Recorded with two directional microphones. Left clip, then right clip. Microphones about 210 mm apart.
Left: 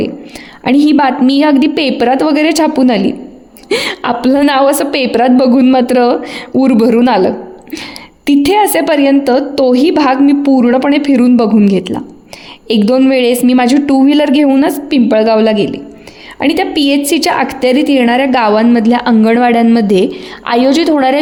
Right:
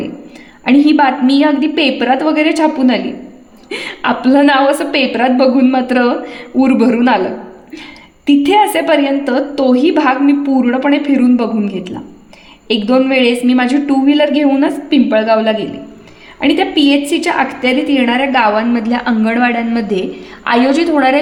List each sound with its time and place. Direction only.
0.6 s a woman's voice: 45° left (ahead or behind)